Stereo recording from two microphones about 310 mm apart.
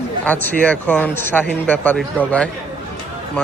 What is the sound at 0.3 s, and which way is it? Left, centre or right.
A man's voice, centre.